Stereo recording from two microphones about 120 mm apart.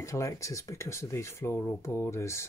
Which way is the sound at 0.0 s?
25° left (ahead or behind).